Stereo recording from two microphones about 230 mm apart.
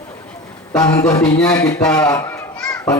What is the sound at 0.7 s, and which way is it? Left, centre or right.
Speech, centre.